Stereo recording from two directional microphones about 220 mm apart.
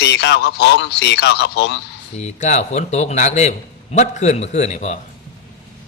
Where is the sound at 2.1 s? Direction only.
30° left (ahead or behind).